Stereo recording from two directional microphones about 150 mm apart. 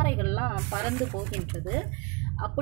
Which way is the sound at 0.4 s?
5° left (ahead or behind).